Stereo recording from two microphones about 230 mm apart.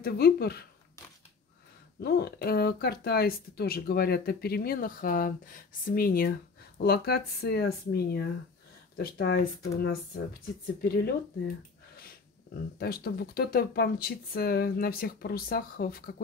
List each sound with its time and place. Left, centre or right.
0.0 s speech: left
2.0 s speech: left
12.7 s speech: left